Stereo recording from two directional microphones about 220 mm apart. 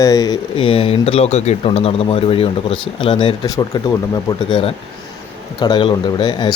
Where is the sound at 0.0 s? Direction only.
15° left (ahead or behind).